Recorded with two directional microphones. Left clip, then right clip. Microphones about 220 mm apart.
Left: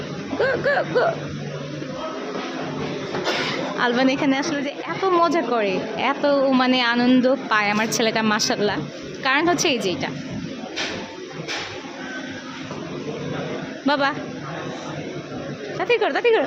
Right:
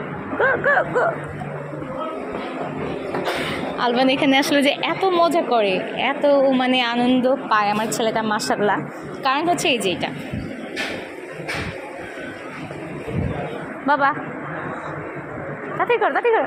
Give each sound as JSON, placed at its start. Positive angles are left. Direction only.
{"t": 0.3, "sound": "speech", "side_deg": 25}
{"t": 3.4, "sound": "a sound", "side_deg": 10}
{"t": 4.3, "sound": "a woman's voice", "side_deg": -15}
{"t": 5.0, "sound": "a woman's voice", "side_deg": 5}
{"t": 13.8, "sound": "speech", "side_deg": 30}
{"t": 15.8, "sound": "speech", "side_deg": 25}